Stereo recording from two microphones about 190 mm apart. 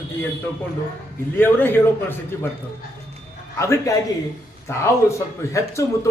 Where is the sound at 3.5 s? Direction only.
15° left (ahead or behind).